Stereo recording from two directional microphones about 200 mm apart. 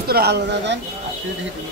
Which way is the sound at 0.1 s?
55° right (ahead or behind).